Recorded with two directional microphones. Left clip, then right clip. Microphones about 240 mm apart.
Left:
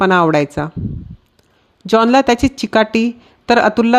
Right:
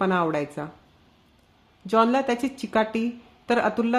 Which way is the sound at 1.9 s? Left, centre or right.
Left.